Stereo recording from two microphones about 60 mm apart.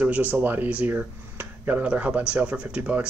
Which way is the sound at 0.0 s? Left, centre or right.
Right.